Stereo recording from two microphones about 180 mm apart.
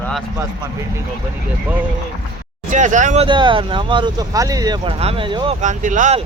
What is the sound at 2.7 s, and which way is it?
Speech, 45° right (ahead or behind).